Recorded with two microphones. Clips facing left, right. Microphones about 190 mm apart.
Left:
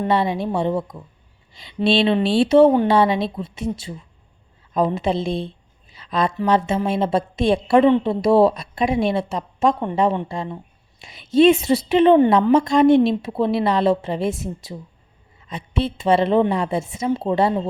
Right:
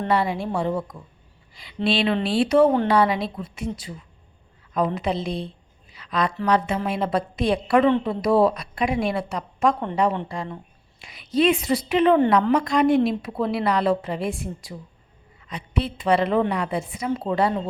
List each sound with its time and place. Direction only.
0.1 s a woman's voice: 20° left (ahead or behind)
5.9 s a sound: 30° left (ahead or behind)
6.3 s a woman's voice: 25° left (ahead or behind)